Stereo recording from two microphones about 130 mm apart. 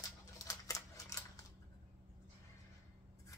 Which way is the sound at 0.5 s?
25° left (ahead or behind).